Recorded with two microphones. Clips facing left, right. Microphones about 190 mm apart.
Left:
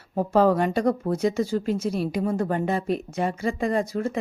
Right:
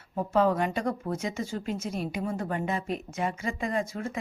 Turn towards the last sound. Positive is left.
turn(degrees=35)  # may be behind; listen again after turning